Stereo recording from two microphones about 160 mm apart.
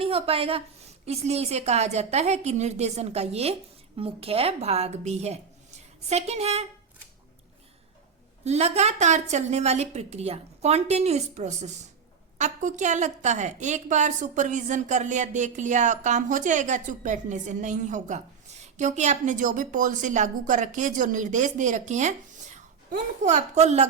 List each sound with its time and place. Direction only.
0.0 s a woman's voice: 35° right (ahead or behind)
8.4 s a woman's voice: 45° right (ahead or behind)